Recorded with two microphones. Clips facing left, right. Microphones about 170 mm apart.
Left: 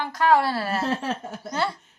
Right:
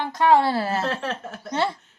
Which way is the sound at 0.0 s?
25° right (ahead or behind).